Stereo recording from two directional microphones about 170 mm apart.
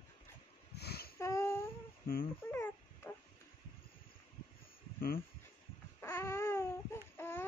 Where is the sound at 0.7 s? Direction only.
70° left (ahead or behind).